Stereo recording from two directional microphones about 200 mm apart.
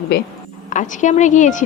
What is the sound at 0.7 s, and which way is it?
Speech, 40° left (ahead or behind).